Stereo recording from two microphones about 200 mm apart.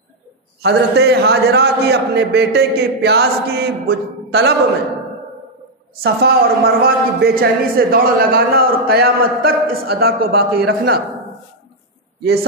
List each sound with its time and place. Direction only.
0.6 s a man's voice: 55° right (ahead or behind)
6.0 s a man's voice: 50° right (ahead or behind)